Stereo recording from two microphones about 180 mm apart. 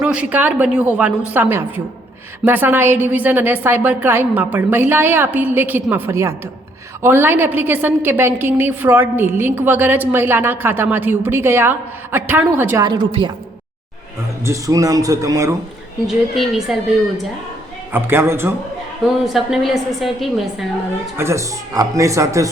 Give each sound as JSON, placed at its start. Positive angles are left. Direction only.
{"t": 0.0, "sound": "a woman's voice", "side_deg": -5}
{"t": 14.4, "sound": "speech", "side_deg": -20}
{"t": 16.0, "sound": "a woman's voice", "side_deg": 0}
{"t": 17.9, "sound": "a woman's voice", "side_deg": -15}
{"t": 19.2, "sound": "a woman's voice", "side_deg": 0}
{"t": 21.2, "sound": "a woman's voice", "side_deg": -15}